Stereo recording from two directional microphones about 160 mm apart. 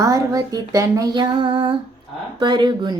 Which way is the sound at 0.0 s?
20° right (ahead or behind).